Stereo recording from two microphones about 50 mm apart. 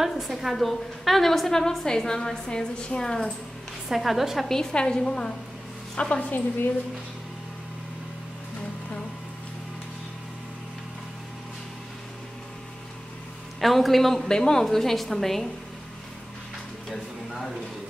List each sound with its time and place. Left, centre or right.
0.0 s a woman's voice: centre
3.9 s a woman's voice: centre
4.5 s a woman's voice: centre
13.6 s a woman's voice: centre
16.9 s a sound: centre